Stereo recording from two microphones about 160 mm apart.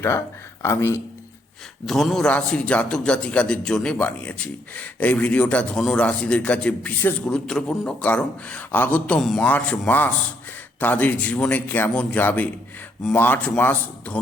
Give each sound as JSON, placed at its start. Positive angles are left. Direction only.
{"t": 0.6, "sound": "a man's voice", "side_deg": 15}
{"t": 1.9, "sound": "a man's voice", "side_deg": 0}